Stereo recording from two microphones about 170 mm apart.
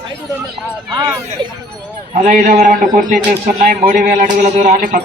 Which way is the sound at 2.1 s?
45° right (ahead or behind).